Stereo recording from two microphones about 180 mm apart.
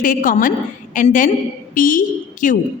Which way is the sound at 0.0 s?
50° left (ahead or behind).